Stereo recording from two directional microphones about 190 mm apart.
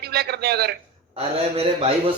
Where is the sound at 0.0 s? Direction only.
60° right (ahead or behind).